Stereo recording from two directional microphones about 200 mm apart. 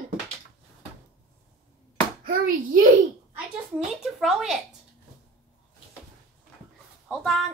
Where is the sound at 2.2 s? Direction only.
45° right (ahead or behind).